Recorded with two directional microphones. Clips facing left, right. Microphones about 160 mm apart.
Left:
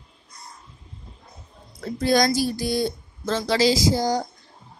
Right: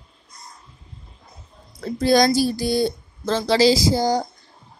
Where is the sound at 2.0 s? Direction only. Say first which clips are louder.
Right 3 dB; 30° right (ahead or behind).